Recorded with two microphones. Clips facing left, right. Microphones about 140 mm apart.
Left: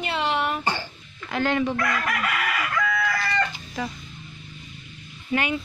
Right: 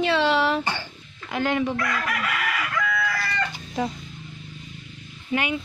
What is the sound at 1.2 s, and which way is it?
Child singing, 15° right (ahead or behind).